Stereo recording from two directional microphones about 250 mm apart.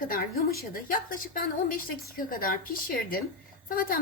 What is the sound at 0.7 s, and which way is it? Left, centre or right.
A woman's voice, left.